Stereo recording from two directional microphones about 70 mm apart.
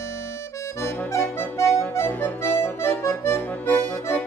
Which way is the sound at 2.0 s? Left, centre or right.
Left.